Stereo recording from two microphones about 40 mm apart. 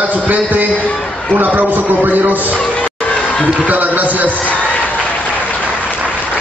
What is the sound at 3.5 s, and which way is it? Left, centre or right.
Speech, right.